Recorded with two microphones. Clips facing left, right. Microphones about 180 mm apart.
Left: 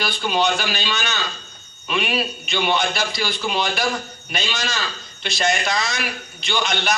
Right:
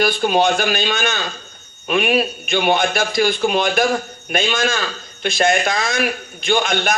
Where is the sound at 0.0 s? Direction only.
50° right (ahead or behind).